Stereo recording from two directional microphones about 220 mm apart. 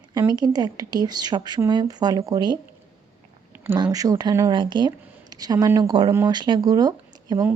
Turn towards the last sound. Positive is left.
turn(degrees=-10)  # may be behind; listen again after turning